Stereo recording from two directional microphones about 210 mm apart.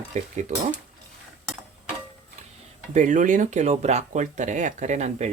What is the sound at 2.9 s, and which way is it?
Speech, 35° right (ahead or behind).